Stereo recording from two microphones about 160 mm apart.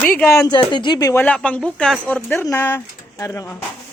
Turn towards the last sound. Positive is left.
turn(degrees=20)  # may be behind; listen again after turning